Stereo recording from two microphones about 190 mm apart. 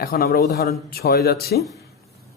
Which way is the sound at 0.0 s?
50° left (ahead or behind).